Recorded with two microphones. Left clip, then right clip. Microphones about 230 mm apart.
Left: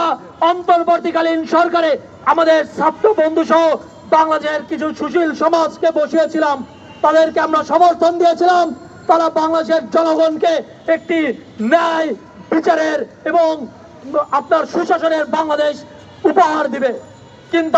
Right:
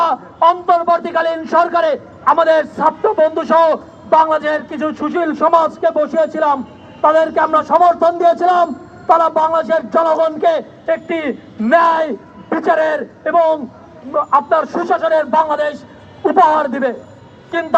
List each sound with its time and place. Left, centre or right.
0.0 s a man's voice: left